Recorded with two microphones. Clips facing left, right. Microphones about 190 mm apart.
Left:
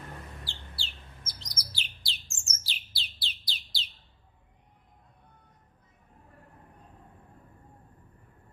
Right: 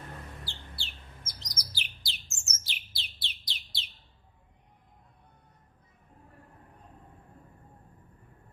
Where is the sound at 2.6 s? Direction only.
30° left (ahead or behind).